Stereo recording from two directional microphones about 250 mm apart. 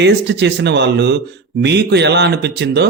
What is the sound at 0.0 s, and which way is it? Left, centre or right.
A man's voice, right.